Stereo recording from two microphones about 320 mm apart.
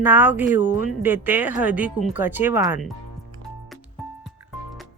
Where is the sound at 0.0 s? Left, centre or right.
Centre.